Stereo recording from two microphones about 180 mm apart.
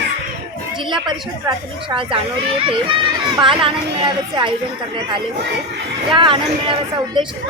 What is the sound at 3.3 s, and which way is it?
A woman's voice, 30° right (ahead or behind).